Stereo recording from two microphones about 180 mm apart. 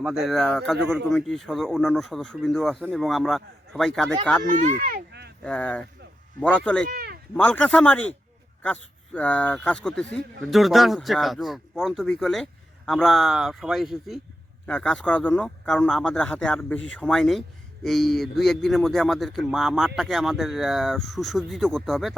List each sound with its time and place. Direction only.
0.0 s speech: centre (ahead or behind)
4.4 s speech: 40° right (ahead or behind)
4.8 s a sound: 55° right (ahead or behind)
5.4 s speech: 5° left (ahead or behind)
6.9 s cat: 60° right (ahead or behind)
7.3 s speech: 10° left (ahead or behind)